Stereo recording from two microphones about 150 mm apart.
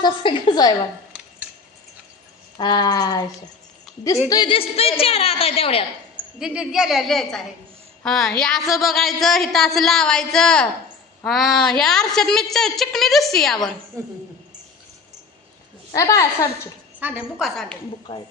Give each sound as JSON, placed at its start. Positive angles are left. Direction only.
{"t": 0.0, "sound": "a woman's voice", "side_deg": 35}
{"t": 2.6, "sound": "speech", "side_deg": 30}
{"t": 4.3, "sound": "a woman's voice", "side_deg": 30}
{"t": 6.4, "sound": "a woman's voice", "side_deg": -5}
{"t": 14.0, "sound": "speech", "side_deg": -20}
{"t": 15.9, "sound": "speech", "side_deg": 20}
{"t": 17.0, "sound": "a woman's voice", "side_deg": -10}
{"t": 17.4, "sound": "a woman's voice", "side_deg": 5}